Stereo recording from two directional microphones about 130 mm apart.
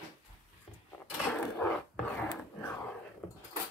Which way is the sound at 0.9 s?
10° left (ahead or behind).